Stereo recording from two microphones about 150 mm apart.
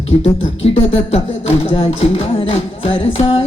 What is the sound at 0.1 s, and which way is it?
Speech, 45° left (ahead or behind).